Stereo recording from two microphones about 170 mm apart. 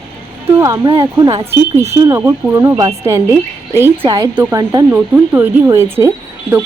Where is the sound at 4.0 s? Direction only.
25° right (ahead or behind).